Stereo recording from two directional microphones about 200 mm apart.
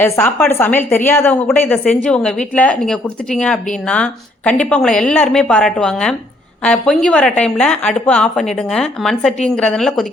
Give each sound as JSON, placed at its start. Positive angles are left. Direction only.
{"t": 0.0, "sound": "a woman's voice", "side_deg": 10}